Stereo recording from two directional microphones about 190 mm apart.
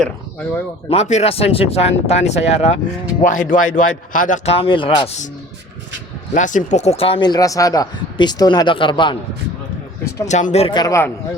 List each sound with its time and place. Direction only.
0.0 s speech: 5° left (ahead or behind)
0.9 s speech: 35° left (ahead or behind)
6.3 s speech: 40° left (ahead or behind); by 9.1 s 25° left (ahead or behind)
10.2 s speech: 40° left (ahead or behind); by 11.1 s 15° left (ahead or behind)